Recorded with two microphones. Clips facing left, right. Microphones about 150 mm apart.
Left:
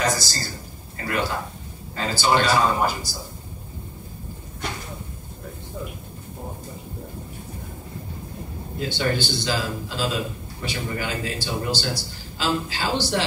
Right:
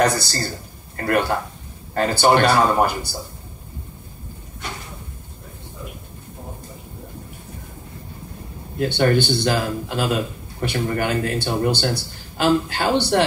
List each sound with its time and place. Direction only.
0.0 s a man's voice: 60° right (ahead or behind)
8.7 s a man's voice: 55° right (ahead or behind)